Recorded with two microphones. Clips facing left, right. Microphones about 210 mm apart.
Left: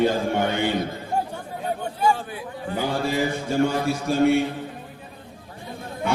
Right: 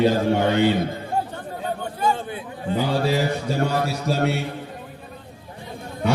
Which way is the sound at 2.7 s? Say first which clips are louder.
Right 3 dB; 50° left (ahead or behind).